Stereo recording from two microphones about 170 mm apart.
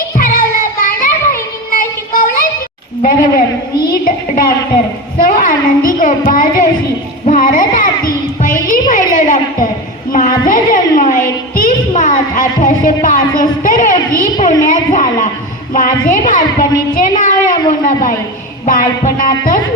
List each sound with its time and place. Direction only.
0.2 s child singing: 55° left (ahead or behind)
3.0 s a woman's voice: 55° left (ahead or behind)
5.1 s child singing: 55° left (ahead or behind)
7.3 s music: 50° left (ahead or behind)
8.9 s a sound: 50° left (ahead or behind)
10.1 s a woman's voice: 55° left (ahead or behind)
14.2 s a sound: 50° left (ahead or behind)
15.7 s a woman's voice: 50° left (ahead or behind)
18.6 s child singing: 50° left (ahead or behind)